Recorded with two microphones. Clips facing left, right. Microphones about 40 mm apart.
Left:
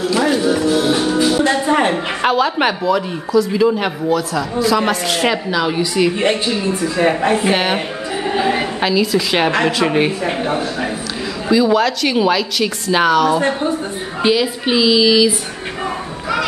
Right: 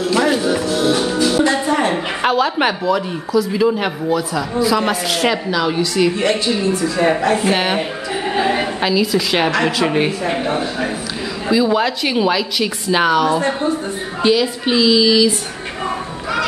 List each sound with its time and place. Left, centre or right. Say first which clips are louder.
0.0 s music: even; centre
0.6 s music: left 1 dB; centre
1.7 s a sound: left 2 dB; left
2.2 s speech: left 1 dB; centre
6.1 s a woman's voice: even; left; by 13.4 s centre
14.2 s speech: even; centre